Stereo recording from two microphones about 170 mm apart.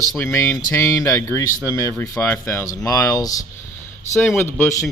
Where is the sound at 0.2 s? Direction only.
15° left (ahead or behind).